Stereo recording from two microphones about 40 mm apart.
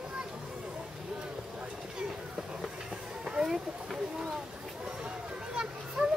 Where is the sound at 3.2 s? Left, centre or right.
Centre.